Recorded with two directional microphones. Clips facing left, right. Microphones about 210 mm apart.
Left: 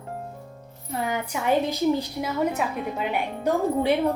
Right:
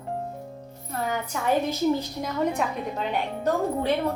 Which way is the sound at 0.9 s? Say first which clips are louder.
Left 1 dB; 10° left (ahead or behind).